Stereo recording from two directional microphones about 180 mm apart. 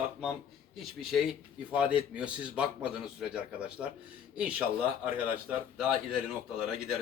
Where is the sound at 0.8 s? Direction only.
Centre (ahead or behind).